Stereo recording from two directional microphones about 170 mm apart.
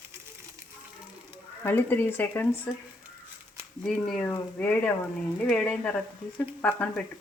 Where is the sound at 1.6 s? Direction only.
10° left (ahead or behind).